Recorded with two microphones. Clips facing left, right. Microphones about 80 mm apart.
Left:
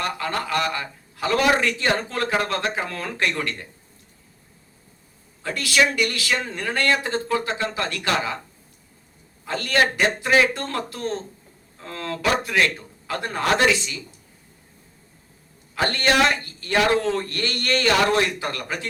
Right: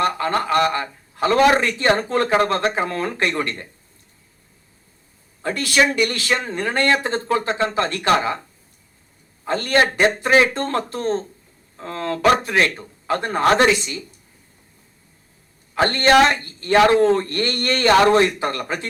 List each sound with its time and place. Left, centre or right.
0.0 s a man's voice: right
5.4 s a man's voice: right
9.4 s a man's voice: right
15.7 s a man's voice: right